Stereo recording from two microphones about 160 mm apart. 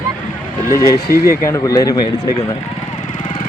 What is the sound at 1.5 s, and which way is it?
Speech, 20° left (ahead or behind).